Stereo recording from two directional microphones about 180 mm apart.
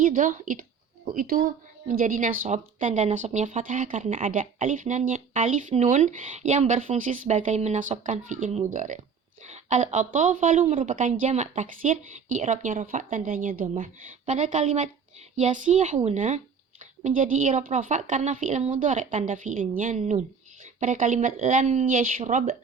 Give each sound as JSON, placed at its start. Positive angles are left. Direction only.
{"t": 0.0, "sound": "a woman's voice", "side_deg": -45}